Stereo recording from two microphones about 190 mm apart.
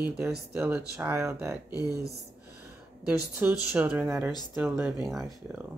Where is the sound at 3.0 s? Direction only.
10° right (ahead or behind).